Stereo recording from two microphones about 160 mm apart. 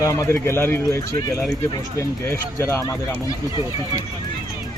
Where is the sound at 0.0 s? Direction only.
20° left (ahead or behind).